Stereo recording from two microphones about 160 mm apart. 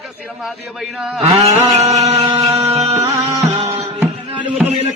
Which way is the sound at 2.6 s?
40° right (ahead or behind).